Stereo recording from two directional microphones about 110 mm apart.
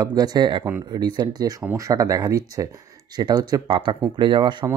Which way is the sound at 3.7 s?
50° right (ahead or behind).